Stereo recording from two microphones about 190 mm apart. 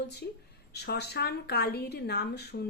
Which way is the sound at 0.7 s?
60° left (ahead or behind).